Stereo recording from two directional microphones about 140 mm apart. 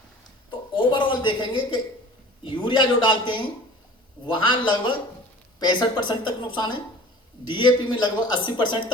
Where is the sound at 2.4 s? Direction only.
35° left (ahead or behind).